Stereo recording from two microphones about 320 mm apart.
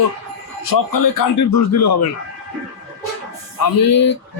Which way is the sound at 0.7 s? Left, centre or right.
Left.